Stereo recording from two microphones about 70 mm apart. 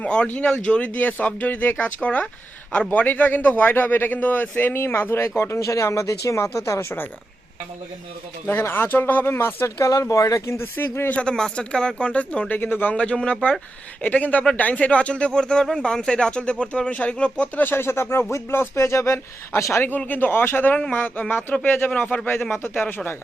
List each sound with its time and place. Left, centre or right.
0.0 s a man's voice: centre; by 5.3 s left
5.4 s speech: left
8.4 s speech: left
9.8 s speech: left
11.1 s speech: centre
13.0 s a man's voice: centre; by 18.3 s left
18.3 s speech: left
20.1 s a man's voice: left